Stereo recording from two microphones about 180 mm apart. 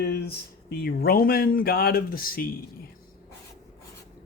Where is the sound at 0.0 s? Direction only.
60° left (ahead or behind).